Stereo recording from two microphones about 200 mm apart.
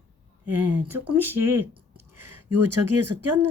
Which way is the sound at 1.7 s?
25° right (ahead or behind).